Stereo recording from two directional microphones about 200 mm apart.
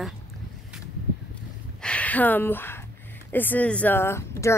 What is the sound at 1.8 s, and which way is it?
Speech, 5° left (ahead or behind).